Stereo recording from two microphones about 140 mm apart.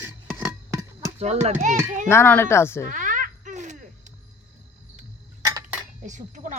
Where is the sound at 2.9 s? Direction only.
70° right (ahead or behind).